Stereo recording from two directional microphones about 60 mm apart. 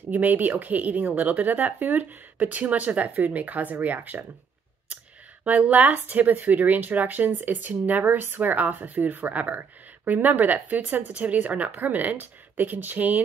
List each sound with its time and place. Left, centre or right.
0.1 s speech: right
5.4 s speech: right